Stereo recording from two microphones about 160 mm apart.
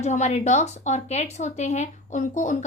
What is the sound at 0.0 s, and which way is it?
Speech, 45° left (ahead or behind).